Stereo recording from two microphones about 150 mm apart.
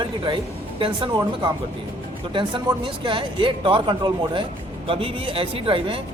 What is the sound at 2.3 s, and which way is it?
Speech, 30° right (ahead or behind).